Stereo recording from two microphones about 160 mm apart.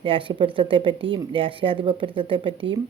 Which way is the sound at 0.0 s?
30° right (ahead or behind).